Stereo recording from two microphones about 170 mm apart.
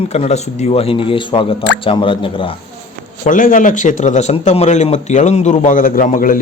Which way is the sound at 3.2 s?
50° left (ahead or behind).